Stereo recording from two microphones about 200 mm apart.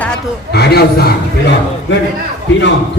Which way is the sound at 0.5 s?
50° left (ahead or behind).